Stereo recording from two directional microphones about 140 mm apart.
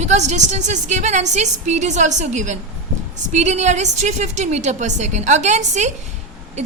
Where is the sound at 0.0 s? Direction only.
55° right (ahead or behind).